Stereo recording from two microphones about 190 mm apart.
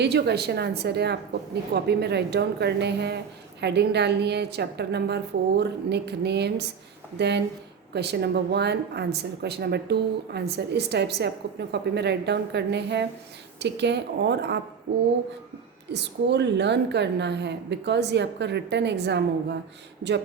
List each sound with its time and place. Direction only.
0.0 s speech: 60° right (ahead or behind)
15.9 s speech: 65° right (ahead or behind)